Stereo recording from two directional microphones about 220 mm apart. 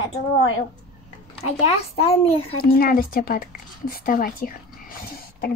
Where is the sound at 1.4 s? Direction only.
25° left (ahead or behind).